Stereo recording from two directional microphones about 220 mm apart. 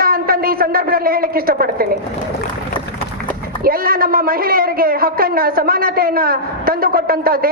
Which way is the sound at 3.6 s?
40° right (ahead or behind).